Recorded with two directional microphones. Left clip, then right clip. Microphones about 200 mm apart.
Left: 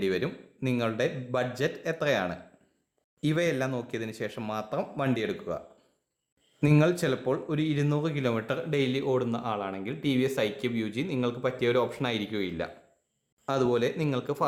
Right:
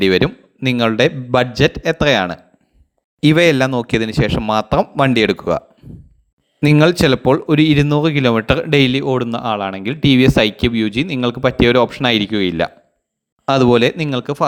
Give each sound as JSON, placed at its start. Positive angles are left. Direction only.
{"t": 0.0, "sound": "speech", "side_deg": -35}